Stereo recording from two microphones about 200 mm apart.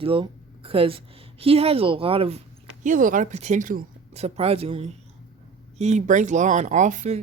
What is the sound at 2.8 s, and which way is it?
Speech, 40° right (ahead or behind).